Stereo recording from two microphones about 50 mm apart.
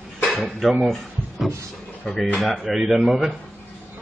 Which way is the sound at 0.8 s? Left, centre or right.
Centre.